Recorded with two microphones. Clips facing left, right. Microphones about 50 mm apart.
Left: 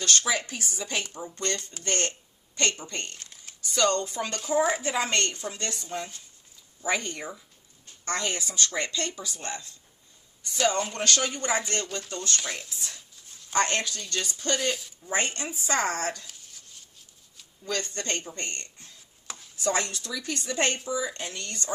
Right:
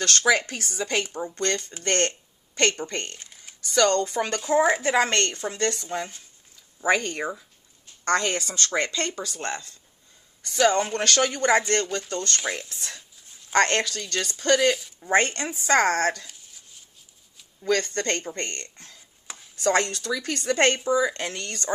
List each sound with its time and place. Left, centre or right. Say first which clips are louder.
0.0 s speech: right 6 dB; right
10.7 s speech: right 4 dB; right
15.0 s speech: right 7 dB; right
16.2 s a sound: right 1 dB; centre
17.6 s speech: right 8 dB; right